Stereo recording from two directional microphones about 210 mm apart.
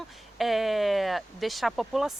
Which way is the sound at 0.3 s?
Centre (ahead or behind).